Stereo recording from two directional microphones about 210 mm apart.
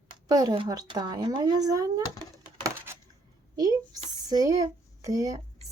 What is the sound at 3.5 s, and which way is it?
A woman's voice, 15° right (ahead or behind).